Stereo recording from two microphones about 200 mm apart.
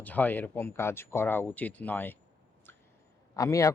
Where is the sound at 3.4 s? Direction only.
15° left (ahead or behind).